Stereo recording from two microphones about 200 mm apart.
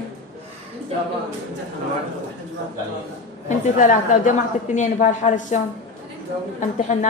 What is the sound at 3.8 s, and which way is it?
A woman's voice, 40° left (ahead or behind).